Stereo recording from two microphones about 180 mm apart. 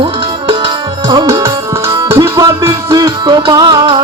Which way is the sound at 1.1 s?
25° right (ahead or behind).